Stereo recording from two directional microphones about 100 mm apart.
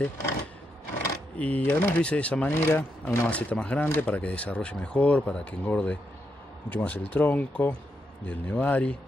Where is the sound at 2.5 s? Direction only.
25° left (ahead or behind).